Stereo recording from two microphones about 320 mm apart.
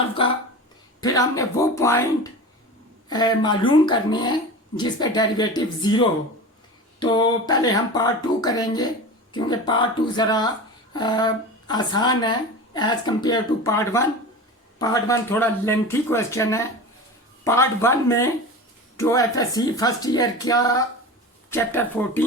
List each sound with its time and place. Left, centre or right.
0.2 s speech: centre